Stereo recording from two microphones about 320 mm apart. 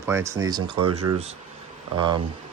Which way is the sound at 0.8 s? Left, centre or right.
Right.